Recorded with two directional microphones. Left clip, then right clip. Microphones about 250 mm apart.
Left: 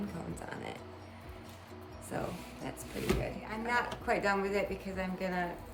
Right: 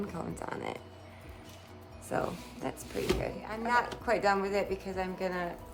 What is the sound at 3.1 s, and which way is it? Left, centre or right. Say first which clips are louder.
A woman's voice: right 1 dB; centre.